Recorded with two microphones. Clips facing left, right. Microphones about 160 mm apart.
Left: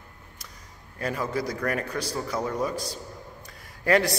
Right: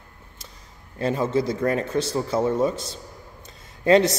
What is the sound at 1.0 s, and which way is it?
A man's voice, 25° right (ahead or behind).